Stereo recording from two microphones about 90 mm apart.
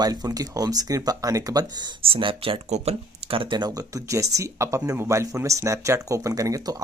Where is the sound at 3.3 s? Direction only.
75° right (ahead or behind).